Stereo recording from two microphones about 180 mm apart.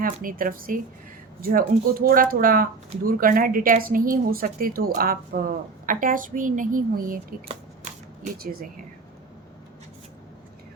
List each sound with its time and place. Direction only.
0.0 s a woman's voice: 50° right (ahead or behind)
8.4 s speech: 55° right (ahead or behind)